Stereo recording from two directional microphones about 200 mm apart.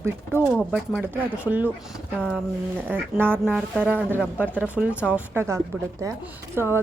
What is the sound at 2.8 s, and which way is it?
Speech, 10° right (ahead or behind).